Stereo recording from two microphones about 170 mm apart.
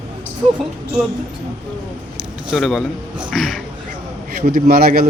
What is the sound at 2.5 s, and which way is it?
Speech, centre (ahead or behind).